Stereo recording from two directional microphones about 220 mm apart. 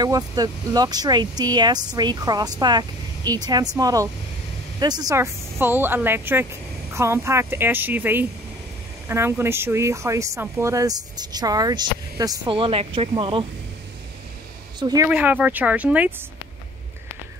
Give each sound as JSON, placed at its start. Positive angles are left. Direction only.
{"t": 0.0, "sound": "speech", "side_deg": -15}
{"t": 14.8, "sound": "speech", "side_deg": -20}
{"t": 15.0, "sound": "speech", "side_deg": -5}